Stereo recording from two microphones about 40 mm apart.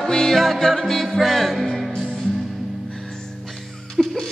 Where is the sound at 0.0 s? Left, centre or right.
Centre.